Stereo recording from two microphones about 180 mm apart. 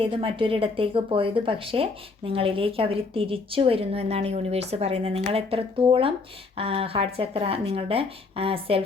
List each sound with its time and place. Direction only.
0.0 s speech: 30° right (ahead or behind)